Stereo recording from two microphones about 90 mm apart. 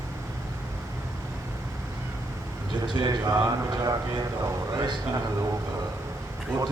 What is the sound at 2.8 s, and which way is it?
Speech, 50° right (ahead or behind).